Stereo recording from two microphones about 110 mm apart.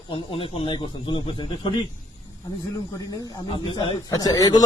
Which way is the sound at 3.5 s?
50° left (ahead or behind).